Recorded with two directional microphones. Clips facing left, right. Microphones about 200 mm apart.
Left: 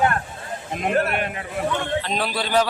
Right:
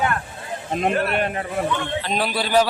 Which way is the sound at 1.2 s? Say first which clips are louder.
Right 4 dB; 40° right (ahead or behind).